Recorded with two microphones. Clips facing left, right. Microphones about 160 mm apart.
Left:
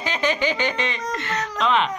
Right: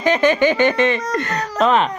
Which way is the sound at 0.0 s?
50° right (ahead or behind).